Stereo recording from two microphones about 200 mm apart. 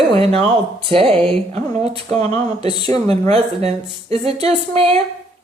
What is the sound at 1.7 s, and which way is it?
Speech, 30° right (ahead or behind).